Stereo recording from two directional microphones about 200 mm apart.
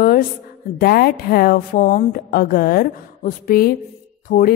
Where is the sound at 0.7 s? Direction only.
50° left (ahead or behind).